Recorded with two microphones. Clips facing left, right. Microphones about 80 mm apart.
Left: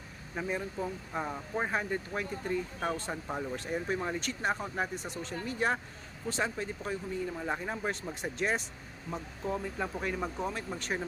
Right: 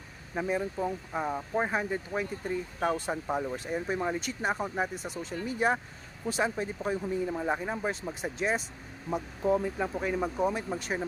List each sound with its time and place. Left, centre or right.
0.3 s speech: centre
9.1 s speech: centre
9.7 s speech: centre